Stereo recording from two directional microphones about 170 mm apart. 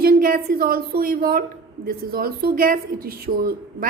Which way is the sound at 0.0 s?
60° right (ahead or behind).